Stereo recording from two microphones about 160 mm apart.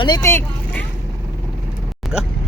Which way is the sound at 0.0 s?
20° left (ahead or behind).